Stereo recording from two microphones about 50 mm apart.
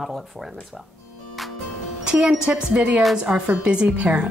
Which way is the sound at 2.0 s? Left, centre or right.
Centre.